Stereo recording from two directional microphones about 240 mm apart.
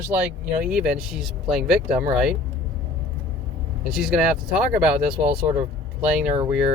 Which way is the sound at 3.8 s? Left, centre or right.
Centre.